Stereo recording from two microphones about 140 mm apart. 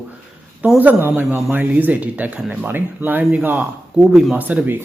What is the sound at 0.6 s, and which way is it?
A man's voice, 10° right (ahead or behind).